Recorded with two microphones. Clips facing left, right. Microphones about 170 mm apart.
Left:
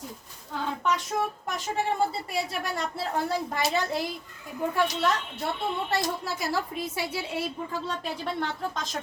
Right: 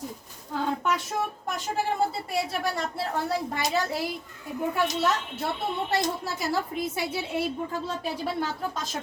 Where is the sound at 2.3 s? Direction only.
Centre (ahead or behind).